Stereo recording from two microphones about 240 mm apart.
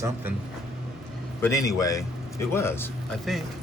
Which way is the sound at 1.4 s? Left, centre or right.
Centre.